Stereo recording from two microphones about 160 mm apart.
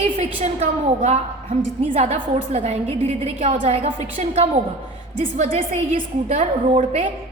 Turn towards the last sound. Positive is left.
turn(degrees=-40)  # may be behind; listen again after turning